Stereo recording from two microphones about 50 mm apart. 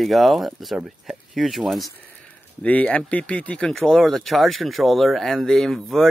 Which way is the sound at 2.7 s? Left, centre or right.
Left.